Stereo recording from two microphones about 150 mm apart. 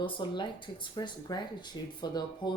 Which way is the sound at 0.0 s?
30° left (ahead or behind).